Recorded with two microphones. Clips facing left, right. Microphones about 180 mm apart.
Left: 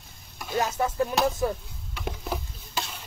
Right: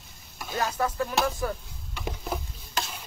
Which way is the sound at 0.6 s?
25° left (ahead or behind).